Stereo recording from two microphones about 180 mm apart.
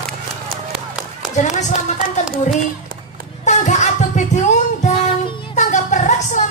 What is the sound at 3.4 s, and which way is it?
Music, 40° left (ahead or behind).